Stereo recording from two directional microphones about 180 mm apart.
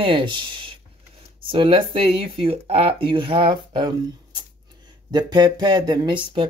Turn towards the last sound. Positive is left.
turn(degrees=-25)  # may be behind; listen again after turning